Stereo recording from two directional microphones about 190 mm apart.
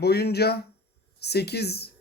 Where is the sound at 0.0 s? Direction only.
60° left (ahead or behind).